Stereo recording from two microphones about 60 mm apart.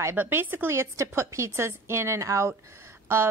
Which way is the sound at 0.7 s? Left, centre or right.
Right.